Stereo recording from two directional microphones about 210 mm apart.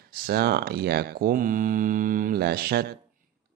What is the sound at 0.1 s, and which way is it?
Speech, 45° right (ahead or behind).